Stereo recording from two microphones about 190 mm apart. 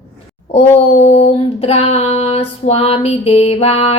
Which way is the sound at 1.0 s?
30° left (ahead or behind).